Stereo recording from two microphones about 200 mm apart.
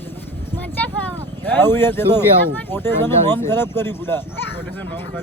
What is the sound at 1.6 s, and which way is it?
Speech, 10° left (ahead or behind).